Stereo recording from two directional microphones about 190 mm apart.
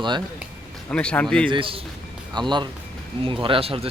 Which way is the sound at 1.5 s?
25° right (ahead or behind).